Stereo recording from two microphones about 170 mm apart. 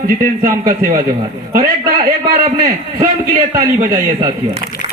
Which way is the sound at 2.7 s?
40° right (ahead or behind).